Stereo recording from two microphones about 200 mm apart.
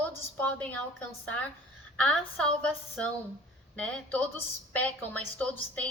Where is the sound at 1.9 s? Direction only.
5° left (ahead or behind).